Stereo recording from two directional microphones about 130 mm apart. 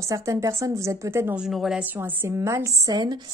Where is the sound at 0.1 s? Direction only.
25° right (ahead or behind).